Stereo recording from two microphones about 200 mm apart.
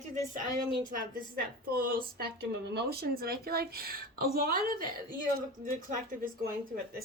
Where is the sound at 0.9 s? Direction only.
45° right (ahead or behind).